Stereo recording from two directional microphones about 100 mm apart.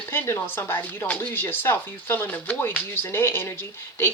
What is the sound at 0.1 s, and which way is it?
Speech, 20° left (ahead or behind).